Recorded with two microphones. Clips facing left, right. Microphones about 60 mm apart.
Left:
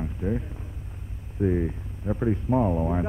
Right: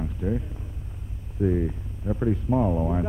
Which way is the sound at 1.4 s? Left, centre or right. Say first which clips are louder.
Even; left.